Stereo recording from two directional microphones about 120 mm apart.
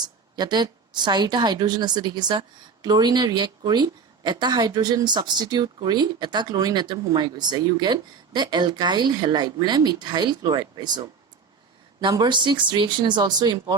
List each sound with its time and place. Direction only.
0.0 s a woman's voice: 35° right (ahead or behind)